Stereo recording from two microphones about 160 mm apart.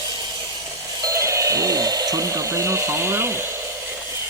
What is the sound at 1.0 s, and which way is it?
Dental drill, 20° right (ahead or behind).